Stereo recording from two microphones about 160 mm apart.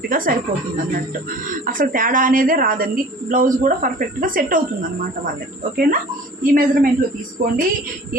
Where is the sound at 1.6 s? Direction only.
60° right (ahead or behind).